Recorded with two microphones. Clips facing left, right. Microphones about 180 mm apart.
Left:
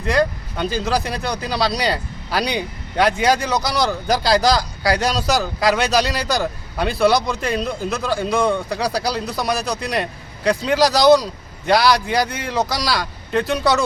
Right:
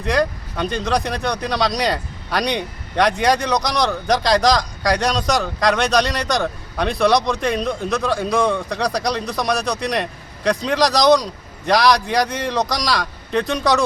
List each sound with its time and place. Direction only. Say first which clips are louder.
0.0 s speech: left 1 dB; centre (ahead or behind)